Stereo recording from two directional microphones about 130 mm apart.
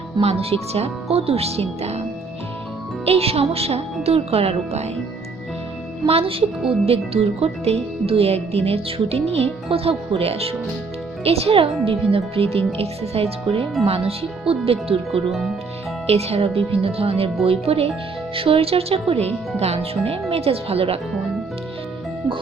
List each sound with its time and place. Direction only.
0.2 s speech: 50° right (ahead or behind)
3.1 s speech: 50° right (ahead or behind)
6.1 s speech: 45° right (ahead or behind)
15.3 s speech: centre (ahead or behind)
16.0 s speech: 50° right (ahead or behind)